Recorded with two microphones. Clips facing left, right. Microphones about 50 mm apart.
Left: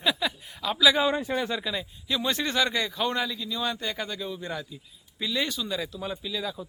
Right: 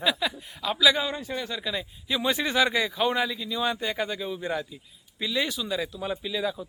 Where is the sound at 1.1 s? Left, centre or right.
Left.